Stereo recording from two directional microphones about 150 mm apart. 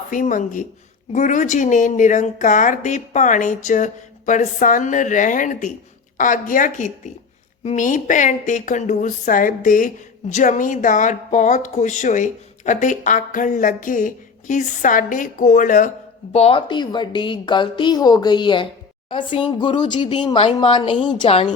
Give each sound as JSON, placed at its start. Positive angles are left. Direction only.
{"t": 0.1, "sound": "speech", "side_deg": 60}
{"t": 16.3, "sound": "a woman's voice", "side_deg": 40}